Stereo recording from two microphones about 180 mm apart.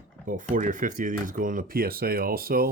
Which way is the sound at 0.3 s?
45° right (ahead or behind).